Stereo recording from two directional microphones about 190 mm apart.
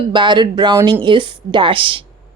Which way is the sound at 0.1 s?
25° right (ahead or behind).